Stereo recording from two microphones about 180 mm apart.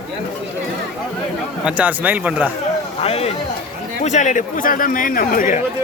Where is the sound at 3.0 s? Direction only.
35° left (ahead or behind).